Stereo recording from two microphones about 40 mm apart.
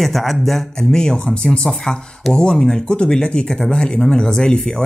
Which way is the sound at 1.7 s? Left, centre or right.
Centre.